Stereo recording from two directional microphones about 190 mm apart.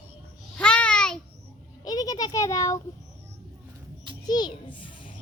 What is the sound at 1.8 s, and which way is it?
A child's voice, 20° left (ahead or behind).